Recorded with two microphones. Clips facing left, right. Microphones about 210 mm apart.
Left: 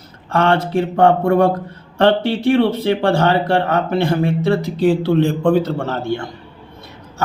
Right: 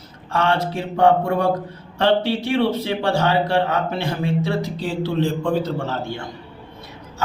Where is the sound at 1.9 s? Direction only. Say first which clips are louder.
Left 3 dB; 55° left (ahead or behind).